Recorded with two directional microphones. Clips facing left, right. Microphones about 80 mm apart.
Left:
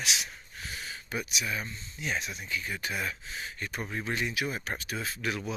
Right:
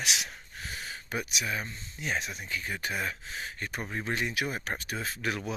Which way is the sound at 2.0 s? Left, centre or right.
Right.